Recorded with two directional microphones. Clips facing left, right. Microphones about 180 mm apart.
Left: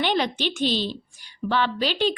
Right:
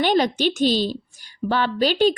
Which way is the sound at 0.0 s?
40° right (ahead or behind).